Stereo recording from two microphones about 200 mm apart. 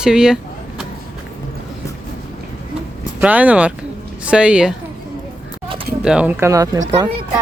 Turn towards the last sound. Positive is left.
turn(degrees=-20)  # may be behind; listen again after turning